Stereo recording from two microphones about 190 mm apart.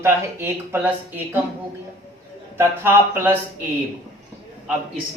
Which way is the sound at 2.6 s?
10° right (ahead or behind).